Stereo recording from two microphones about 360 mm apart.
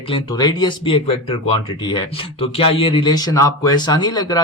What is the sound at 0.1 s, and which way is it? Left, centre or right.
Speech, centre.